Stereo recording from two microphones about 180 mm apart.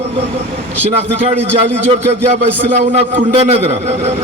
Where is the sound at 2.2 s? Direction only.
40° right (ahead or behind).